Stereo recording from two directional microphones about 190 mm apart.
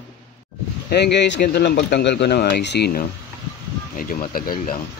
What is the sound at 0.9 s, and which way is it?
Speech, 65° left (ahead or behind).